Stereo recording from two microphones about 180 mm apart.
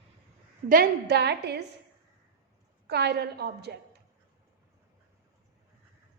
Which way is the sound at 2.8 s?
65° right (ahead or behind).